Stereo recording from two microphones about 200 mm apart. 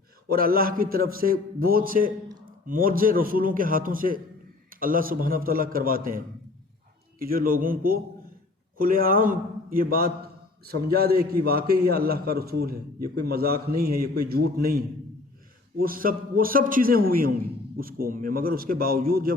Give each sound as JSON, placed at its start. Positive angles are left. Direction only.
{"t": 0.3, "sound": "a man's voice", "side_deg": -45}